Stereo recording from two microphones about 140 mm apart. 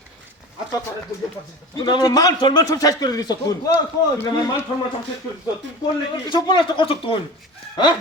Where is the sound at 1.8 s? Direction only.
30° left (ahead or behind).